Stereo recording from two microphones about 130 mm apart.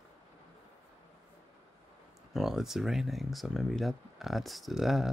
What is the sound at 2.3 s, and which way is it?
Speech, centre (ahead or behind).